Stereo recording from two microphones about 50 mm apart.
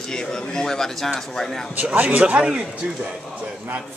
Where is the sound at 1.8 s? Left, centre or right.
Right.